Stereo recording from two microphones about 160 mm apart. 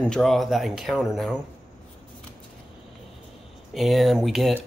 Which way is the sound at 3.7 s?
Centre (ahead or behind).